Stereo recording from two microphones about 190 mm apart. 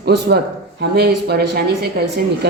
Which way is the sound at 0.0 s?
60° right (ahead or behind).